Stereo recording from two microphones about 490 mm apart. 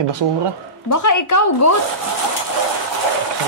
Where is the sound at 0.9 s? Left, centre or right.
Left.